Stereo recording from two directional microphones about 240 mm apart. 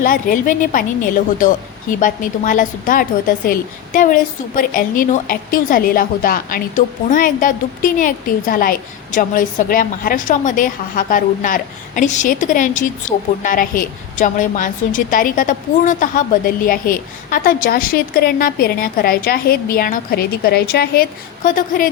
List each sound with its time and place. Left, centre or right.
0.0 s a woman's voice: left